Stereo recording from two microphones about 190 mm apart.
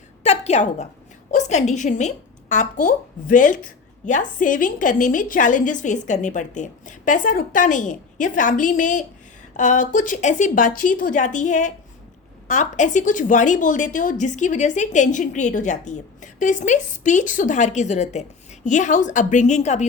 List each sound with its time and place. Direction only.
0.2 s a woman's voice: 35° left (ahead or behind)